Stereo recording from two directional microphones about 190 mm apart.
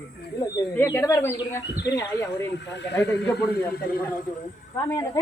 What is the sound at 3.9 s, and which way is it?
Speech, 50° left (ahead or behind).